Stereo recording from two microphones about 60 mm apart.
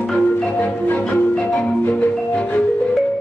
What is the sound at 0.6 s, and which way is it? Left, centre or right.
Marimba, left.